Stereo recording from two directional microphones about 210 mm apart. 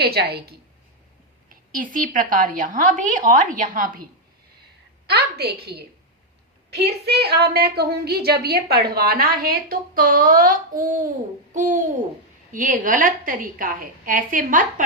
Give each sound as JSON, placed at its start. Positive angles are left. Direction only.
{"t": 0.0, "sound": "a woman's voice", "side_deg": -50}
{"t": 5.0, "sound": "a woman's voice", "side_deg": -50}